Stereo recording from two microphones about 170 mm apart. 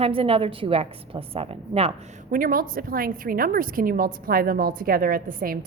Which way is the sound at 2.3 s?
55° right (ahead or behind).